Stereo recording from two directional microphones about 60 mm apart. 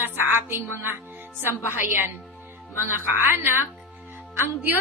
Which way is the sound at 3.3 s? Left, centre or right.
Right.